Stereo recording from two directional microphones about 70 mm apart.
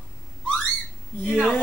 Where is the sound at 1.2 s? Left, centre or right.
Centre.